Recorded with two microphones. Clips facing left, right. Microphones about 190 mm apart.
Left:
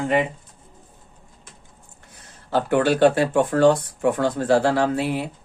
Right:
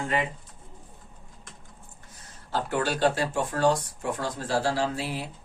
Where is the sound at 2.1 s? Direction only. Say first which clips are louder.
Left 8 dB; 65° left (ahead or behind).